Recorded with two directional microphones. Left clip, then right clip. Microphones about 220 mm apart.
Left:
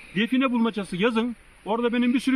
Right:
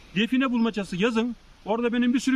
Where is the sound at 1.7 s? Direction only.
10° right (ahead or behind).